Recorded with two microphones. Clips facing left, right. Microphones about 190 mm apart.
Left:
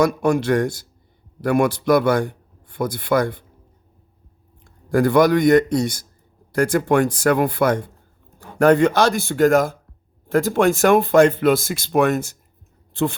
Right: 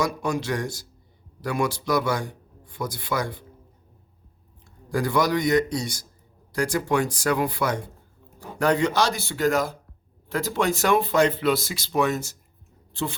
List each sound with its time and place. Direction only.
0.0 s a man's voice: 55° left (ahead or behind)
4.9 s speech: 55° left (ahead or behind)